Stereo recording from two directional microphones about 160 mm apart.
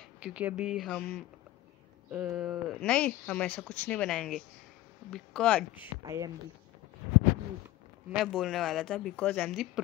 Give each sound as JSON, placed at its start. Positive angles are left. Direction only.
{"t": 0.2, "sound": "speech", "side_deg": -5}
{"t": 2.8, "sound": "speech", "side_deg": 5}
{"t": 6.0, "sound": "speech", "side_deg": -20}
{"t": 8.1, "sound": "speech", "side_deg": -5}